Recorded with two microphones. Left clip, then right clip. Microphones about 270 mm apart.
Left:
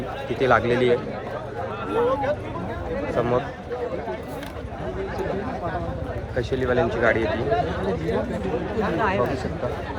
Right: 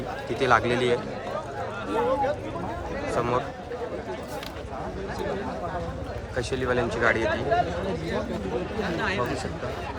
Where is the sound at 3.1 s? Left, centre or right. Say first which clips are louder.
Left 3 dB; centre.